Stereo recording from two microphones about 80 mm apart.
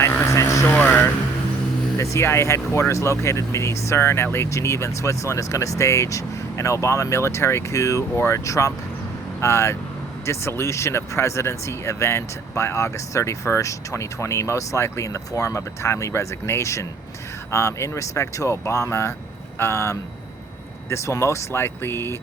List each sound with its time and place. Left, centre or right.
0.0 s vehicle: left
0.8 s a sound: left
2.0 s speech: left